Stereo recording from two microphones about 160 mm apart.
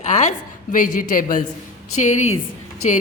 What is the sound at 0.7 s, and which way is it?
Speech, 55° left (ahead or behind).